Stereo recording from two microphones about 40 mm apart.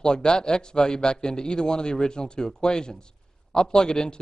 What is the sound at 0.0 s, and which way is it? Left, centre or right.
A man's voice, left.